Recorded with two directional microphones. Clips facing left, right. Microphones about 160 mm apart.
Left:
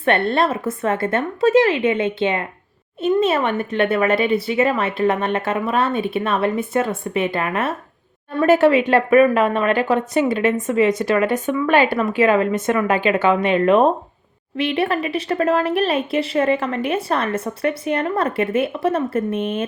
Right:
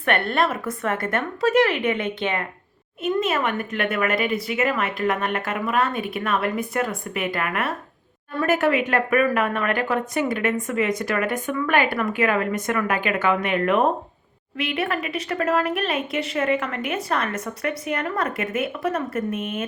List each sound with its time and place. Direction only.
0.0 s a woman's voice: 25° left (ahead or behind)